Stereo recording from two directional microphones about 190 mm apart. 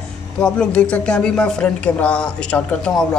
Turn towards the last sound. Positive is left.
turn(degrees=5)  # may be behind; listen again after turning